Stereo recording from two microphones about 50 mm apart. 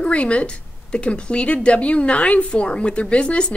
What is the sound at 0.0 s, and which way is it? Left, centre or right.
A woman's voice, left.